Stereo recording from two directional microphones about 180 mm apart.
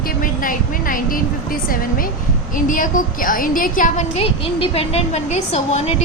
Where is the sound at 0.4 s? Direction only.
50° left (ahead or behind).